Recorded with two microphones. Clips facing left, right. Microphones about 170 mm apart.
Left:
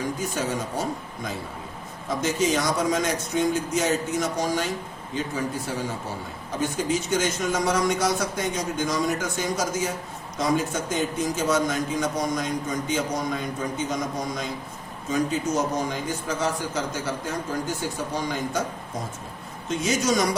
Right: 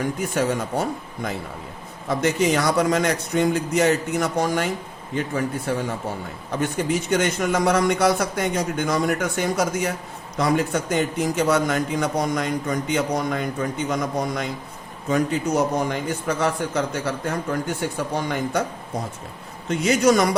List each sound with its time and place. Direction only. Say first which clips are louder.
0.2 s a man's voice: right 5 dB; 60° right (ahead or behind)
6.6 s a man's voice: right 2 dB; 60° right (ahead or behind)
19.6 s a man's voice: right 6 dB; 65° right (ahead or behind)